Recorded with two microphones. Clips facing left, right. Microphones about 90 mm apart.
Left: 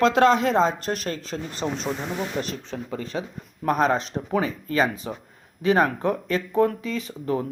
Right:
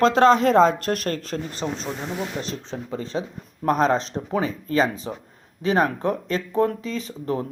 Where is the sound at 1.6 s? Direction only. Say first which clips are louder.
Left 1 dB; 20° left (ahead or behind).